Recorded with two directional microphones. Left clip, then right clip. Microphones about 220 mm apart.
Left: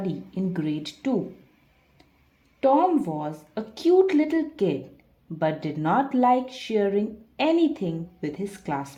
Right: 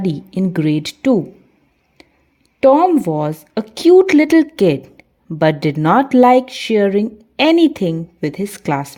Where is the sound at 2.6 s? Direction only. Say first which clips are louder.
Right 9 dB; 40° right (ahead or behind).